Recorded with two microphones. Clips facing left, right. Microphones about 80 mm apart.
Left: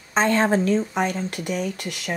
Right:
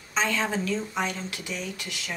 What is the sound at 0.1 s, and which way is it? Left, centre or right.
Speech, left.